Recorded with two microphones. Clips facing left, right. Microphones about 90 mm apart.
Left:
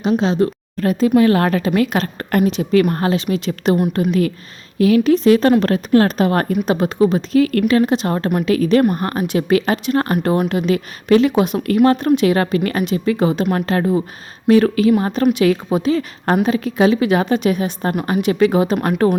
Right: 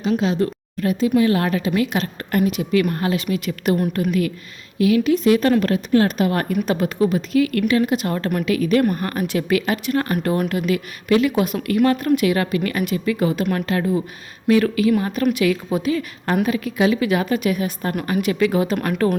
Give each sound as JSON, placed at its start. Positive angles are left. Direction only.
{"t": 0.1, "sound": "speech", "side_deg": 30}
{"t": 0.8, "sound": "speech", "side_deg": 45}
{"t": 3.2, "sound": "a woman's voice", "side_deg": 30}
{"t": 4.8, "sound": "speech", "side_deg": 40}
{"t": 6.7, "sound": "speech", "side_deg": 25}
{"t": 9.2, "sound": "a woman's voice", "side_deg": 20}
{"t": 10.0, "sound": "a woman's voice", "side_deg": 35}
{"t": 11.6, "sound": "a woman's voice", "side_deg": 35}
{"t": 13.5, "sound": "a woman's voice", "side_deg": 40}
{"t": 18.8, "sound": "speech", "side_deg": 35}